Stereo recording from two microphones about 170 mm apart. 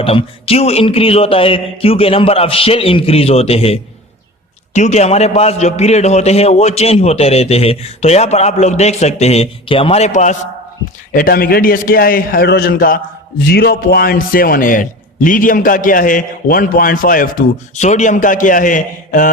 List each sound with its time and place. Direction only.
0.0 s a man's voice: 35° left (ahead or behind)
11.1 s a man's voice: 60° left (ahead or behind)